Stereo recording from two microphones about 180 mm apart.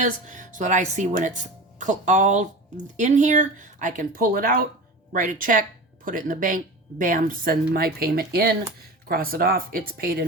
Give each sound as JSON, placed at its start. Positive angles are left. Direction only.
{"t": 0.0, "sound": "speech", "side_deg": -45}